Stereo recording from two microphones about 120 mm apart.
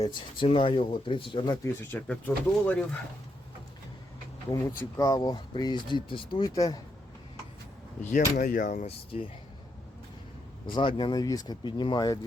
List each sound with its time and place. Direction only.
0.0 s speech: 40° left (ahead or behind)
1.6 s speech: 20° left (ahead or behind)
4.9 s speech: 30° left (ahead or behind)
6.5 s speech: 35° left (ahead or behind)
8.1 s speech: 90° left
8.9 s speech: 55° left (ahead or behind)
10.7 s speech: 45° left (ahead or behind)